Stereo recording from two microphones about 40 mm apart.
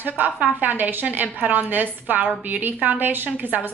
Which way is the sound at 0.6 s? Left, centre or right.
Right.